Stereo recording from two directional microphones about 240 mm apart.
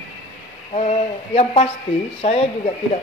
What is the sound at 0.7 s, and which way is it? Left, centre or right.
Speech, left.